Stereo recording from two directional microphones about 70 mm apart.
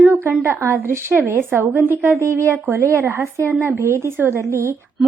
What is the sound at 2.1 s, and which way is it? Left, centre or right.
A woman's voice, right.